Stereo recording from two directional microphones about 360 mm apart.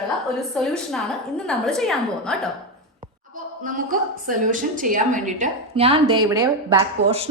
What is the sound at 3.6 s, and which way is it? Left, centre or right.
A woman's voice, right.